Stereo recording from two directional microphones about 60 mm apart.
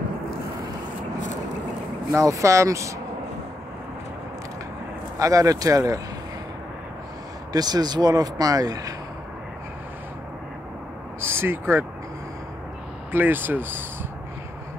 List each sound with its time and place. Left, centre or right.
2.1 s speech: right
5.2 s speech: right
7.5 s speech: right
11.1 s vehicle: right
13.1 s speech: right